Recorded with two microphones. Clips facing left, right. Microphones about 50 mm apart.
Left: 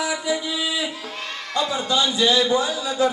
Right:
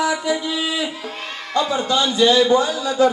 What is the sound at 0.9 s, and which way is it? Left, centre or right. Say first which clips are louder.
Crowd: right 2 dB; centre.